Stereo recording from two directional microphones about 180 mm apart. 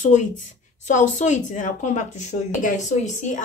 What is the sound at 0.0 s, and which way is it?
A woman's voice, 45° left (ahead or behind).